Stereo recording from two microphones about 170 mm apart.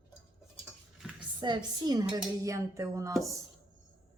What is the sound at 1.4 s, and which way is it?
Speech, 25° right (ahead or behind).